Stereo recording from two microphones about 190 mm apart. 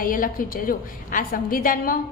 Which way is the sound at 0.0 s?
45° left (ahead or behind).